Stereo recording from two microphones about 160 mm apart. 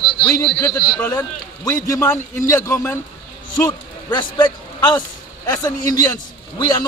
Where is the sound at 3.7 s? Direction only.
25° left (ahead or behind).